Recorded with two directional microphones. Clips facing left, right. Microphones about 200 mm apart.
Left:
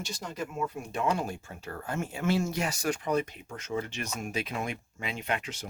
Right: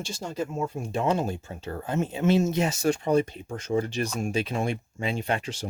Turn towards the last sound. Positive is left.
turn(degrees=-30)  # may be behind; listen again after turning